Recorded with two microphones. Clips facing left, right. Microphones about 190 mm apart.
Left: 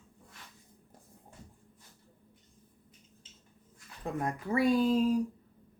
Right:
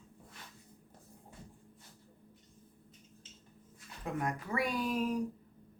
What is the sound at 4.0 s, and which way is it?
Speech, 30° left (ahead or behind).